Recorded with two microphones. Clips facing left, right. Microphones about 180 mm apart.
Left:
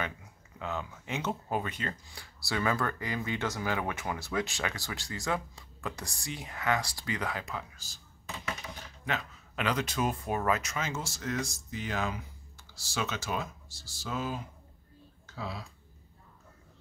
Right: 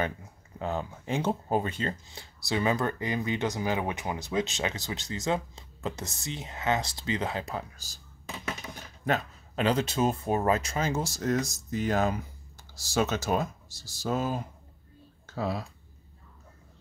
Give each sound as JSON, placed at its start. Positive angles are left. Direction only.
{"t": 0.6, "sound": "speech", "side_deg": -35}
{"t": 9.0, "sound": "speech", "side_deg": -35}